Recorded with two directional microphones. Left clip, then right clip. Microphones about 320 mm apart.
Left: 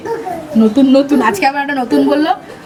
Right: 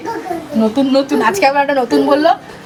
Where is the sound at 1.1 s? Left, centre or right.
Centre.